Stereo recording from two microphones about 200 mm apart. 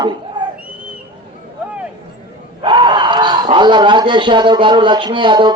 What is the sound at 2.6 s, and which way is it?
Speech, 25° right (ahead or behind).